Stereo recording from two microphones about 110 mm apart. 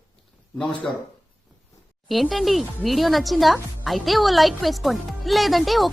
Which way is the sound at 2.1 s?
Centre (ahead or behind).